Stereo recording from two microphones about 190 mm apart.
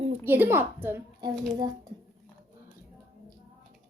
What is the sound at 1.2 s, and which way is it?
Speech, 20° right (ahead or behind).